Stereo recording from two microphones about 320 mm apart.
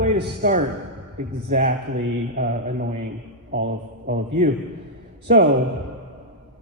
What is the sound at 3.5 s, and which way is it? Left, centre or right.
Speech, right.